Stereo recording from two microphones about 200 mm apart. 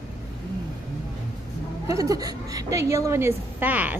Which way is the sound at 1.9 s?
15° right (ahead or behind).